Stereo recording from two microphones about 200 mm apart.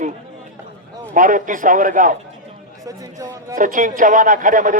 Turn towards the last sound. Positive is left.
turn(degrees=-40)  # may be behind; listen again after turning